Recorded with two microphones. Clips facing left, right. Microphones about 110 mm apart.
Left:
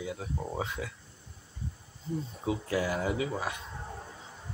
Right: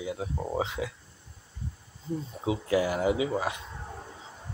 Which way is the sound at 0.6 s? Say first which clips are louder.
Right 4 dB; 90° right.